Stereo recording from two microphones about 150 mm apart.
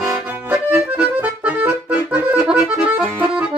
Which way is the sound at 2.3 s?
5° right (ahead or behind).